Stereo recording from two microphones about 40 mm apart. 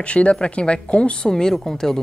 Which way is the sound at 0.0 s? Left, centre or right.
Left.